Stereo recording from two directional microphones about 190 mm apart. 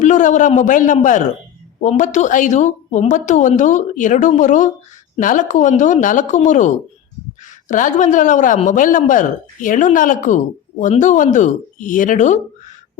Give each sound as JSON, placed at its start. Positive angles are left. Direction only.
{"t": 0.0, "sound": "speech", "side_deg": 40}